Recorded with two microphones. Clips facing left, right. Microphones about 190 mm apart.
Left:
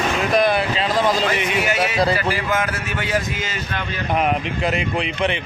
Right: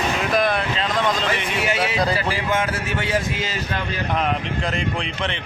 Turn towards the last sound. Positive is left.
turn(degrees=10)  # may be behind; listen again after turning